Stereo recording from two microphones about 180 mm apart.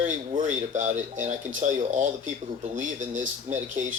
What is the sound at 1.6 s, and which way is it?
Speech, 45° right (ahead or behind).